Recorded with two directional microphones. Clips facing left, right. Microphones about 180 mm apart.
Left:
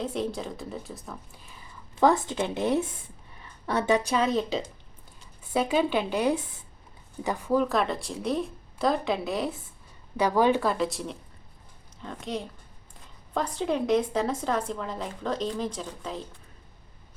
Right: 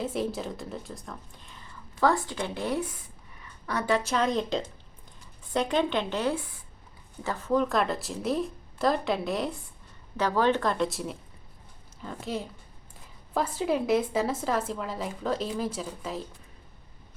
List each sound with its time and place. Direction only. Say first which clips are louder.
0.0 s a woman's voice: even; 5° right (ahead or behind)
2.0 s a woman's voice: left 3 dB; 20° left (ahead or behind); by 9.6 s centre (ahead or behind)
10.2 s a woman's voice: left 2 dB; 10° left (ahead or behind); by 16.2 s 5° right (ahead or behind)